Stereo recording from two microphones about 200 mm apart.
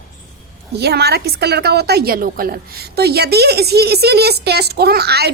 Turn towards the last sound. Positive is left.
turn(degrees=-55)  # may be behind; listen again after turning